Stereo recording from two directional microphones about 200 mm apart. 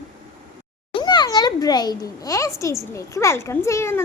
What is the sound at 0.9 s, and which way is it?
A child's voice, 20° left (ahead or behind).